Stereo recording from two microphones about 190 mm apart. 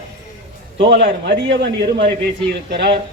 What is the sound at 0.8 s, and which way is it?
A man's voice, 65° right (ahead or behind).